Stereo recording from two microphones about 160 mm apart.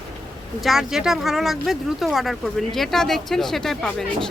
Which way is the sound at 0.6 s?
Centre (ahead or behind).